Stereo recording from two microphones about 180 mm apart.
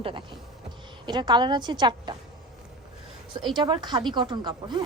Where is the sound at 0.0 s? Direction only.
30° right (ahead or behind).